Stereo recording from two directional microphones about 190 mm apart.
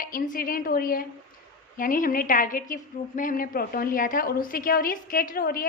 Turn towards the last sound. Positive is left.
turn(degrees=50)  # may be behind; listen again after turning